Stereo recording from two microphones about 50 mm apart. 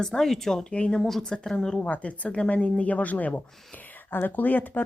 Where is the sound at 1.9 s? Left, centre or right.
Left.